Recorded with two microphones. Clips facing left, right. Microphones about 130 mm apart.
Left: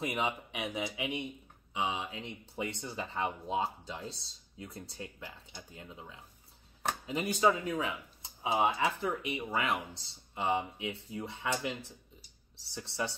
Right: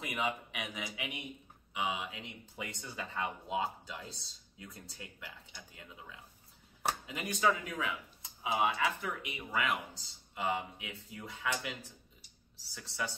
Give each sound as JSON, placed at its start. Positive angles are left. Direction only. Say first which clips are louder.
{"t": 0.0, "sound": "speech", "louder": "left 2 dB", "side_deg": 30}
{"t": 12.7, "sound": "speech", "louder": "left 3 dB", "side_deg": 30}